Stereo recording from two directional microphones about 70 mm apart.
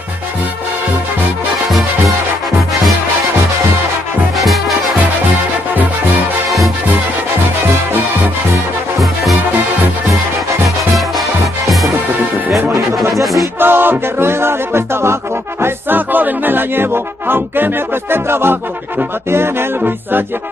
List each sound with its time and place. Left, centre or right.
1.5 s music: centre
4.4 s music: centre
13.1 s music: centre
13.6 s a sound: right
15.6 s music: right